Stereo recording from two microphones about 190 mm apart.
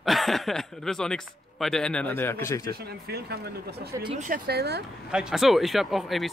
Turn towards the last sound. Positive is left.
turn(degrees=0)  # may be behind; listen again after turning